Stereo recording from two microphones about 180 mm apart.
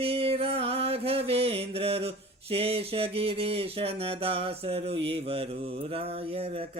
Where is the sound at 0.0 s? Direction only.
30° right (ahead or behind).